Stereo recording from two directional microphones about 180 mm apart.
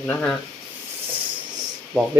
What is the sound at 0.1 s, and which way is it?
Speech, 5° left (ahead or behind).